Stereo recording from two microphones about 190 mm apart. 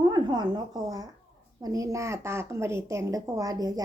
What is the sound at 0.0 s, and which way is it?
A woman's voice, 20° right (ahead or behind).